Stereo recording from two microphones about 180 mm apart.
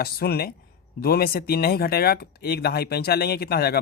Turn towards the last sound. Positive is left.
turn(degrees=60)  # may be behind; listen again after turning